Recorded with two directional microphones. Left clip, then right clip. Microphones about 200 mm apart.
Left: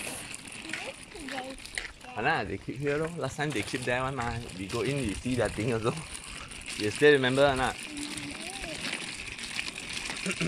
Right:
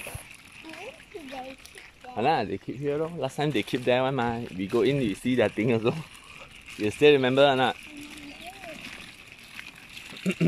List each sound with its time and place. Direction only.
2.1 s speech: 15° right (ahead or behind)